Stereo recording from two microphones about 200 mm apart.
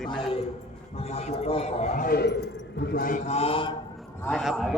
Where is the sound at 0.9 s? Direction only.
30° left (ahead or behind).